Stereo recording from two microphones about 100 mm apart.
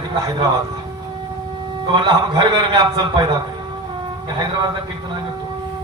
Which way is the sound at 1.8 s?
50° right (ahead or behind).